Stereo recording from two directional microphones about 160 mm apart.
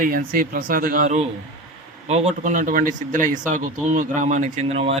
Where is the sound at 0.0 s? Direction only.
60° right (ahead or behind).